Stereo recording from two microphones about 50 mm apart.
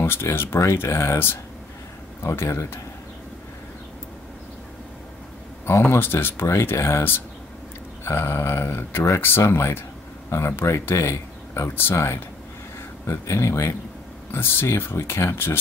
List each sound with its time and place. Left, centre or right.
0.0 s speech: left
5.7 s speech: left
14.3 s speech: left